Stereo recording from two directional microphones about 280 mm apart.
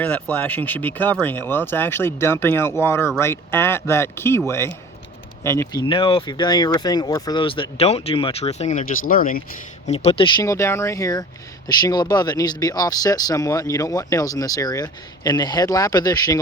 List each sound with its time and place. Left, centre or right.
0.0 s speech: centre